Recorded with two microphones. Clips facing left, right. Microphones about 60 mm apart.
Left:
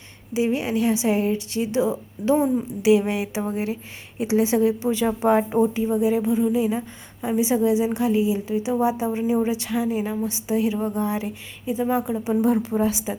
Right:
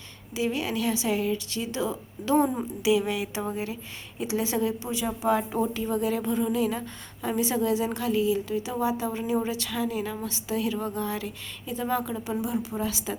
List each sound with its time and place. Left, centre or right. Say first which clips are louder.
0.3 s a woman's voice: left 6 dB; left
5.6 s a woman's voice: left 6 dB; centre